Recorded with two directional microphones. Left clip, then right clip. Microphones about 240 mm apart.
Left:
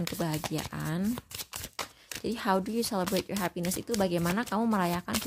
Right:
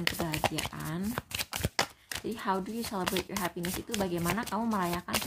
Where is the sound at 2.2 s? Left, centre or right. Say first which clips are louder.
Left 4 dB; left.